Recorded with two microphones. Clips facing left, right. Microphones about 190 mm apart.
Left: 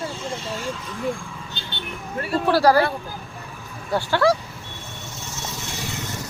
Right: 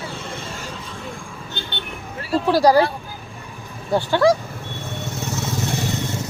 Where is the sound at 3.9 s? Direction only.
15° right (ahead or behind).